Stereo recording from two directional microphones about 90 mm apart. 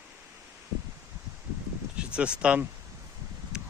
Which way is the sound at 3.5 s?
10° right (ahead or behind).